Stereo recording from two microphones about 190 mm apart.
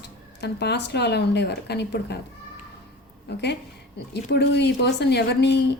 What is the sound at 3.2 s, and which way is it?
Speech, 65° left (ahead or behind).